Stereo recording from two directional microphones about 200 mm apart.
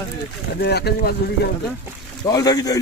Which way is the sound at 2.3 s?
20° left (ahead or behind).